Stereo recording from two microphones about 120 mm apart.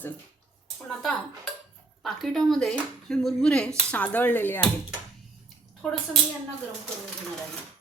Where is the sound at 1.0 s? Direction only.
5° left (ahead or behind).